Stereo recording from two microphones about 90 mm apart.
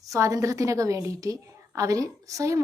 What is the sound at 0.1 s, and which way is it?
A woman's voice, 40° right (ahead or behind).